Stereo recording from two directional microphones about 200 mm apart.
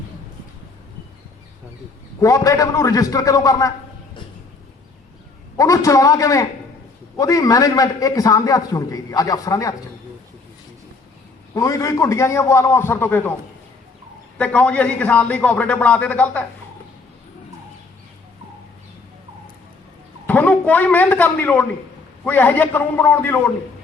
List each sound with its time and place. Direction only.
2.2 s a man's voice: 15° left (ahead or behind)
5.5 s a man's voice: 15° left (ahead or behind)
11.5 s a man's voice: 15° left (ahead or behind)
14.3 s a man's voice: 5° left (ahead or behind)
20.2 s a man's voice: 10° left (ahead or behind)